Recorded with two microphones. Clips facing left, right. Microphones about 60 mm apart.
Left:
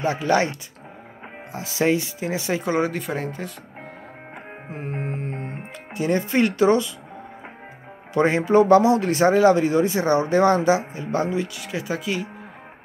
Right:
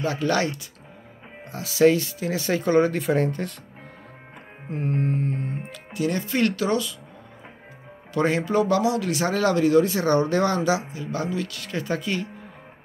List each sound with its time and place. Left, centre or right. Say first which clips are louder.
0.3 s speech: left 3 dB; left; by 3.5 s centre
4.6 s speech: right 5 dB; centre; by 6.9 s left
8.1 s speech: left 4 dB; left
9.3 s speech: left 1 dB; left
11.4 s speech: left 1 dB; centre